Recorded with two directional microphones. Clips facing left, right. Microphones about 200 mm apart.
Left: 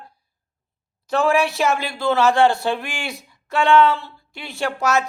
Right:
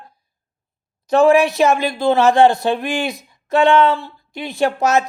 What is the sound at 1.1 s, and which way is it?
Speech, 20° right (ahead or behind).